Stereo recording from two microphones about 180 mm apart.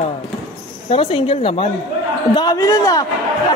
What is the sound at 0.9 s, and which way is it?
A man's voice, 30° left (ahead or behind).